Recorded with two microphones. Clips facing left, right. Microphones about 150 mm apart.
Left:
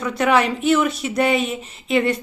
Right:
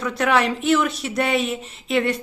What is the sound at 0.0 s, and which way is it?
Speech, centre (ahead or behind).